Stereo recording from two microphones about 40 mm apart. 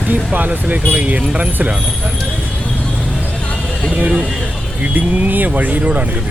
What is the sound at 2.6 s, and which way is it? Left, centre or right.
Vehicle, left.